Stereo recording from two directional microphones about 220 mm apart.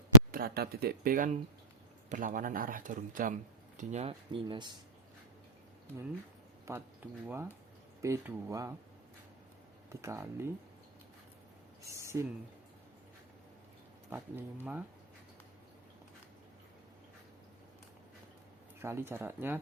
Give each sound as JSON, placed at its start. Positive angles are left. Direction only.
{"t": 0.3, "sound": "speech", "side_deg": -40}
{"t": 6.7, "sound": "speech", "side_deg": -10}
{"t": 9.9, "sound": "speech", "side_deg": -10}
{"t": 11.9, "sound": "a sound", "side_deg": -15}
{"t": 14.1, "sound": "speech", "side_deg": -10}
{"t": 18.8, "sound": "speech", "side_deg": -10}